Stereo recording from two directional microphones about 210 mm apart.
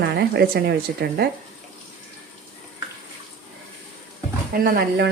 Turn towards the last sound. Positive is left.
turn(degrees=-45)  # may be behind; listen again after turning